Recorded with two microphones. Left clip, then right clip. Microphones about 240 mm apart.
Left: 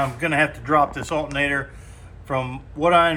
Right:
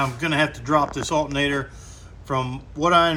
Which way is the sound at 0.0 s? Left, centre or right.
Centre.